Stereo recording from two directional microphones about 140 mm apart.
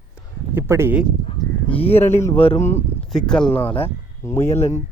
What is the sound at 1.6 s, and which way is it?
Speech, 45° left (ahead or behind).